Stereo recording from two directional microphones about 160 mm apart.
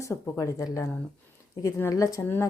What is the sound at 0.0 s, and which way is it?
Speech, 20° left (ahead or behind).